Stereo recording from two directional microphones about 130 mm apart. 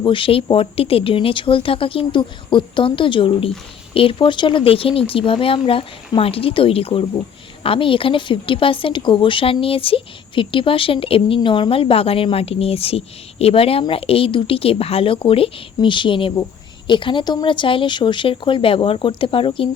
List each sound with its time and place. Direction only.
0.0 s a woman's voice: 40° left (ahead or behind)